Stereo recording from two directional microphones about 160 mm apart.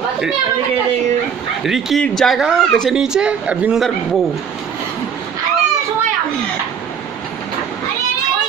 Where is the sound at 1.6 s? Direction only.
Centre (ahead or behind).